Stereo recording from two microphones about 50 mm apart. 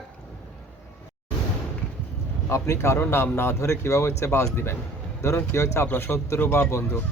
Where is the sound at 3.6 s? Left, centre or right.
Left.